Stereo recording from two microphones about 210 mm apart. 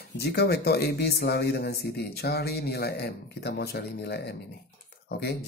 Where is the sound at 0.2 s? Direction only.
50° left (ahead or behind).